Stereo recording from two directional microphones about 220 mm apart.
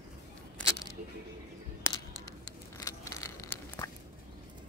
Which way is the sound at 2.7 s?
15° left (ahead or behind).